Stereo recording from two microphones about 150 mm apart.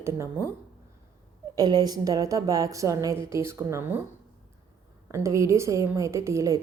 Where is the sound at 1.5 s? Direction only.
25° right (ahead or behind).